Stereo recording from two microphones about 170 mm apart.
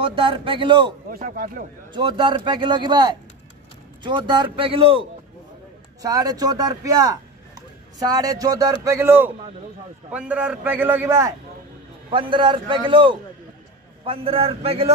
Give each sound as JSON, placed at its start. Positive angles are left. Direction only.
{"t": 0.0, "sound": "speech", "side_deg": -30}
{"t": 1.1, "sound": "speech", "side_deg": -60}
{"t": 2.0, "sound": "speech", "side_deg": -25}
{"t": 6.0, "sound": "a man's voice", "side_deg": -20}
{"t": 12.1, "sound": "a man's voice", "side_deg": -30}